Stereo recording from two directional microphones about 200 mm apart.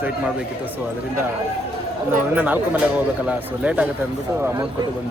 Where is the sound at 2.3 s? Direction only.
10° right (ahead or behind).